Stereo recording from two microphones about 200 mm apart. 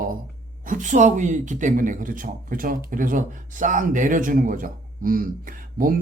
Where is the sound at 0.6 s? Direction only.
40° right (ahead or behind).